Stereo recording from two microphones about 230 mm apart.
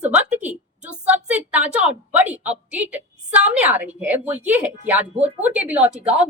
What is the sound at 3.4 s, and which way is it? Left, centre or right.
Speech, right.